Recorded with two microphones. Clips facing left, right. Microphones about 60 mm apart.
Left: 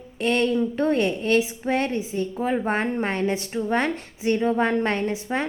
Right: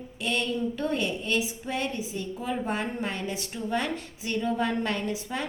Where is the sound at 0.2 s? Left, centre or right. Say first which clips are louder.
Left 7 dB; left.